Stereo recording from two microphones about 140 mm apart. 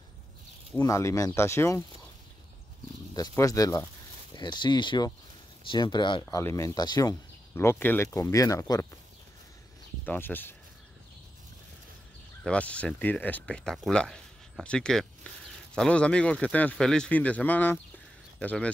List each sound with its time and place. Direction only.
0.7 s speech: 20° left (ahead or behind)
3.2 s speech: 25° left (ahead or behind)
6.2 s speech: 20° left (ahead or behind)
7.5 s speech: 15° left (ahead or behind)
10.0 s speech: 15° left (ahead or behind)
12.4 s speech: 10° left (ahead or behind)